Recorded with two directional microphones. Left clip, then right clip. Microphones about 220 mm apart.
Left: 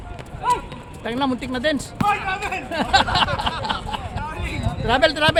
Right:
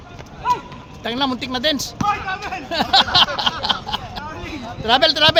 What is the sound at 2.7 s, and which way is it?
Speech, 45° right (ahead or behind).